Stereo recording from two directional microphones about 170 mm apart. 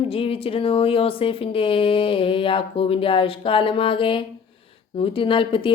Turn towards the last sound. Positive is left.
turn(degrees=30)  # may be behind; listen again after turning